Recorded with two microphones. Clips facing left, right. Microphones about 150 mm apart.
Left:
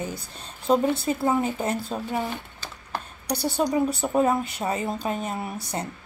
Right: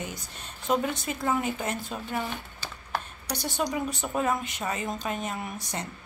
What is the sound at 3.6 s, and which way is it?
Speech, 30° left (ahead or behind).